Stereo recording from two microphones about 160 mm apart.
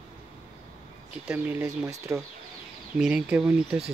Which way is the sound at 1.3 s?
15° right (ahead or behind).